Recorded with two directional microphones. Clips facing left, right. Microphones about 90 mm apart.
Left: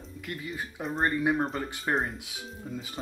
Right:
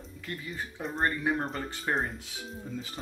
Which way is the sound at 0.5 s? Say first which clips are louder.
Left 2 dB; 5° left (ahead or behind).